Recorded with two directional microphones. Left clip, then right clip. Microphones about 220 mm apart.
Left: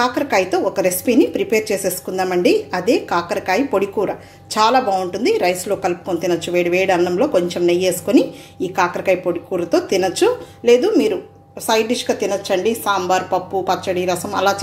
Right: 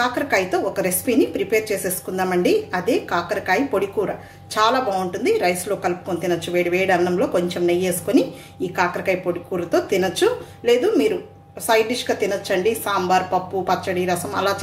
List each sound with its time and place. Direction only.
0.0 s a woman's voice: 25° left (ahead or behind)